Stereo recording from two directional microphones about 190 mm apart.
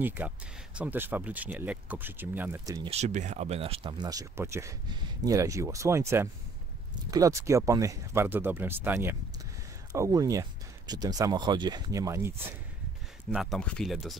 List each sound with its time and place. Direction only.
0.0 s speech: 10° right (ahead or behind)
2.9 s speech: 35° right (ahead or behind); by 12.4 s 15° right (ahead or behind)
13.2 s speech: 5° right (ahead or behind)